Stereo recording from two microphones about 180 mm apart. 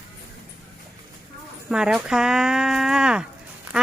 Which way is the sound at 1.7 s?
5° right (ahead or behind).